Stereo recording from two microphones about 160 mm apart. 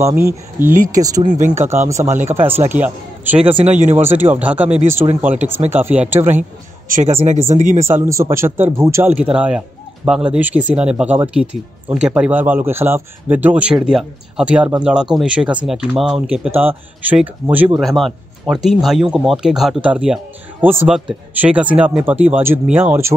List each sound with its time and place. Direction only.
0.0 s speech: 15° right (ahead or behind)
3.5 s speech: 45° right (ahead or behind)
3.9 s speech: 15° right (ahead or behind)
6.9 s speech: 45° right (ahead or behind)
7.8 s speech: 15° right (ahead or behind)
17.7 s speech: centre (ahead or behind)